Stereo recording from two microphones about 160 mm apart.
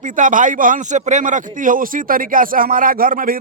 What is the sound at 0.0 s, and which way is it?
A man's voice, 55° right (ahead or behind).